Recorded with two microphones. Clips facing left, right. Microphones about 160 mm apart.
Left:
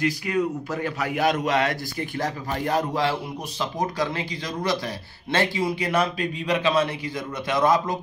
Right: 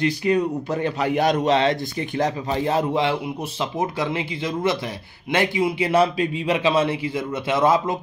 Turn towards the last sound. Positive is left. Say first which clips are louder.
# right 2 dB
turn(degrees=-25)  # may be behind; listen again after turning